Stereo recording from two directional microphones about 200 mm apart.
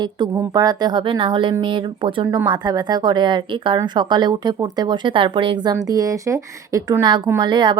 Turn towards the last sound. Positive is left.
turn(degrees=-20)  # may be behind; listen again after turning